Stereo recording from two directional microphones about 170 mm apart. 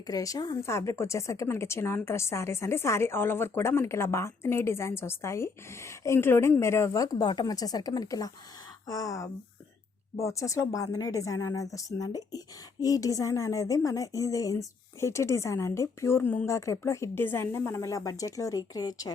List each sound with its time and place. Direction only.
0.1 s a woman's voice: 20° left (ahead or behind)